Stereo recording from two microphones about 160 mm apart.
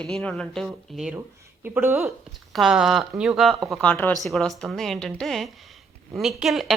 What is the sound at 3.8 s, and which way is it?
Speech, 10° left (ahead or behind).